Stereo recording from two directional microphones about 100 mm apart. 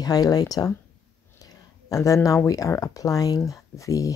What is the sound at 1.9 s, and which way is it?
A woman's voice, 30° left (ahead or behind).